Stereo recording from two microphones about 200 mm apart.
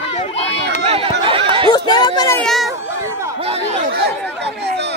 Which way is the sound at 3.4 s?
30° right (ahead or behind).